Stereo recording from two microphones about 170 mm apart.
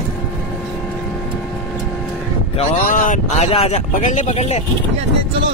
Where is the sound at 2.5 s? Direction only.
35° left (ahead or behind).